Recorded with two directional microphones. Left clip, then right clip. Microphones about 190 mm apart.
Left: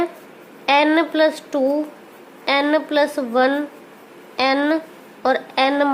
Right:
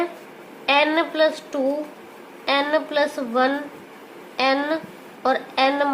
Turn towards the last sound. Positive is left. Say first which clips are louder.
# left 2 dB
turn(degrees=45)  # may be behind; listen again after turning